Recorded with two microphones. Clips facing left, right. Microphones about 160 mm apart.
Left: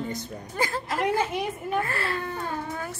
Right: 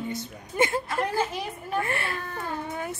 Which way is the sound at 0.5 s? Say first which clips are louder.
Right 4 dB; 25° right (ahead or behind).